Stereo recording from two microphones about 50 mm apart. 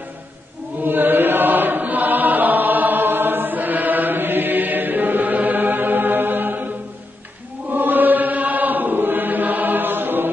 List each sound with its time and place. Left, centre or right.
0.8 s chant: right
7.7 s chant: right